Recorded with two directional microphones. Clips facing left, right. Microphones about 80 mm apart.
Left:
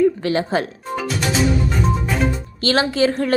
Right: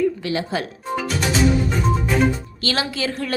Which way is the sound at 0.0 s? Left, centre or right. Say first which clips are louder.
Left 4 dB; left.